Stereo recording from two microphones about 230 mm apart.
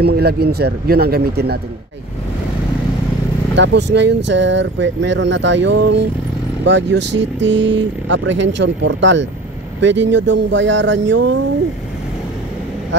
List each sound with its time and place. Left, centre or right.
0.0 s speech: right
3.5 s speech: right